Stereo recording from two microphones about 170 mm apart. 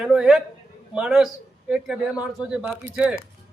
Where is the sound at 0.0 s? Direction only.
5° right (ahead or behind).